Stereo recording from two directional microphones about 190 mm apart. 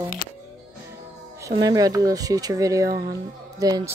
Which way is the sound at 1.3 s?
20° right (ahead or behind).